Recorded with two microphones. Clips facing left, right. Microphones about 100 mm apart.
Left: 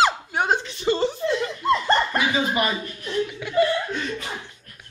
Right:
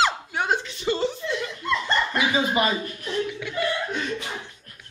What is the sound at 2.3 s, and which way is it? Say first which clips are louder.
Speech: even; 20° right (ahead or behind).